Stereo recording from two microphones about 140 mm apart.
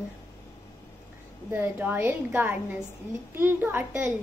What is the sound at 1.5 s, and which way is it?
Speech, 15° right (ahead or behind).